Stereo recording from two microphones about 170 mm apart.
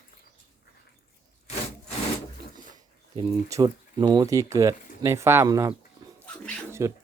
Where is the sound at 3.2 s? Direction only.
20° right (ahead or behind).